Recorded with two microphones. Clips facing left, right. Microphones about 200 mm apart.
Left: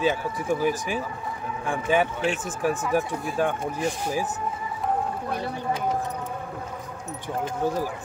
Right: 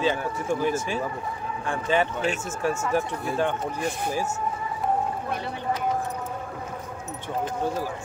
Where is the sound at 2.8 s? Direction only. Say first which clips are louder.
Left 1 dB; 5° left (ahead or behind).